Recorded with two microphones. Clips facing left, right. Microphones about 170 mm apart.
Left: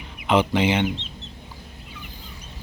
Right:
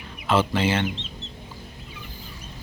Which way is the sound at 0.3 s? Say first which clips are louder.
Left 2 dB; 15° left (ahead or behind).